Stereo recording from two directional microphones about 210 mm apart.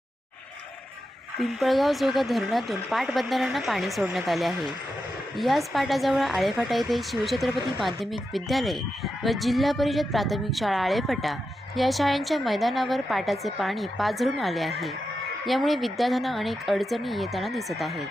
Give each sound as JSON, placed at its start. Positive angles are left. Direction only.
{"t": 1.4, "sound": "speech", "side_deg": 0}